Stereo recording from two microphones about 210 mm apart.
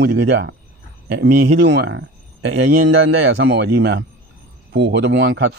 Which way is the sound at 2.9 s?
55° right (ahead or behind).